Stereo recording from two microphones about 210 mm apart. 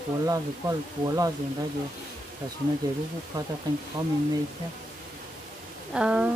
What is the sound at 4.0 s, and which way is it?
Speech, 20° right (ahead or behind).